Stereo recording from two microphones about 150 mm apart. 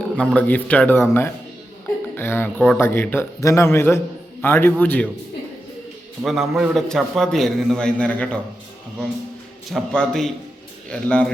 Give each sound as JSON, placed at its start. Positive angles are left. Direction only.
{"t": 0.2, "sound": "a man's voice", "side_deg": 10}
{"t": 2.6, "sound": "a man's voice", "side_deg": 5}
{"t": 6.2, "sound": "a man's voice", "side_deg": 0}
{"t": 9.6, "sound": "a man's voice", "side_deg": 5}